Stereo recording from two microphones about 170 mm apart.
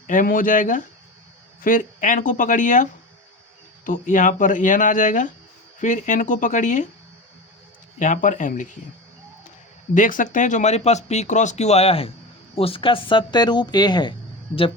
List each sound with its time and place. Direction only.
0.1 s speech: 50° left (ahead or behind)
7.9 s speech: 50° left (ahead or behind)
9.9 s speech: 50° left (ahead or behind); by 14.1 s 25° left (ahead or behind)